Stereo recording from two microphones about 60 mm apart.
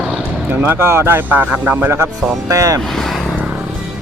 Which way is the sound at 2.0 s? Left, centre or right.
Right.